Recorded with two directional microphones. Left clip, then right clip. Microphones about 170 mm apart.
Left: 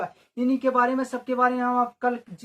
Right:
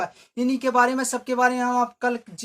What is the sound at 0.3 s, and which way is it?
Speech, 30° right (ahead or behind).